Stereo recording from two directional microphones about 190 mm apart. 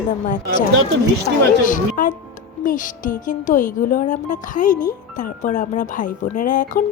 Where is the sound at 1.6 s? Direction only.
45° left (ahead or behind).